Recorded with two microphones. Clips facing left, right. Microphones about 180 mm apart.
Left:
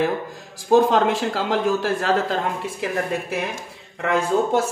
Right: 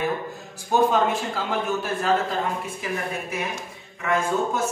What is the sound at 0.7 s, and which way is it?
A man's voice, 90° left.